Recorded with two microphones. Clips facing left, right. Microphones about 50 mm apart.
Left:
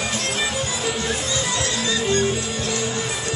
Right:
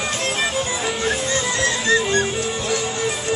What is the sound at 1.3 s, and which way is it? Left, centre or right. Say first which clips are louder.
Music: right 3 dB; right.